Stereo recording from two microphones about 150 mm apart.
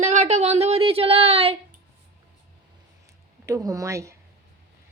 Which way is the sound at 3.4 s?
25° right (ahead or behind).